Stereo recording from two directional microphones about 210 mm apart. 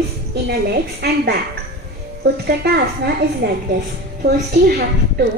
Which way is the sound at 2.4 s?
50° right (ahead or behind).